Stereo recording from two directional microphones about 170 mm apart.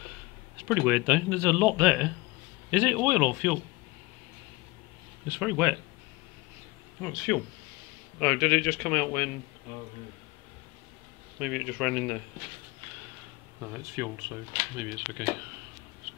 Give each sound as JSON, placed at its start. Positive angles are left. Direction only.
{"t": 0.7, "sound": "speech", "side_deg": -5}
{"t": 5.3, "sound": "speech", "side_deg": -5}
{"t": 7.0, "sound": "a man's voice", "side_deg": 0}
{"t": 11.3, "sound": "a man's voice", "side_deg": -5}
{"t": 13.6, "sound": "speech", "side_deg": -15}